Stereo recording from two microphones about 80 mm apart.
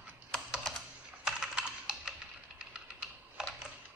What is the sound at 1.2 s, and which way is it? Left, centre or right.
Typing, centre.